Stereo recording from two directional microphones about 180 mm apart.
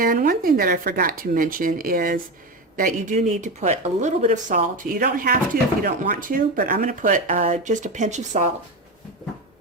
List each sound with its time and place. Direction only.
0.0 s speech: 50° right (ahead or behind)